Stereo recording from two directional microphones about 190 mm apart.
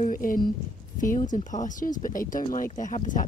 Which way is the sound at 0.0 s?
45° left (ahead or behind).